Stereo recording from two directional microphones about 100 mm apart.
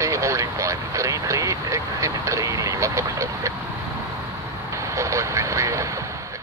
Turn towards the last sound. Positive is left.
turn(degrees=-30)  # may be behind; listen again after turning